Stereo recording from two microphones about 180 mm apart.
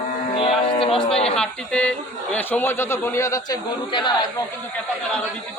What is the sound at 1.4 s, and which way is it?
A man's voice, 5° left (ahead or behind).